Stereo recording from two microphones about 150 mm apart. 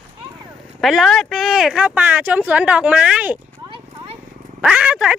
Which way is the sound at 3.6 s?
35° right (ahead or behind).